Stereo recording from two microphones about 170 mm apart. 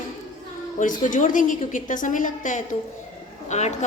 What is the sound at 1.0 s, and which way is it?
A woman's voice, 50° left (ahead or behind).